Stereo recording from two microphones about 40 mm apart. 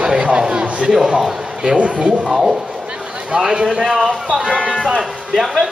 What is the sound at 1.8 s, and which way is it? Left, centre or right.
Speech, right.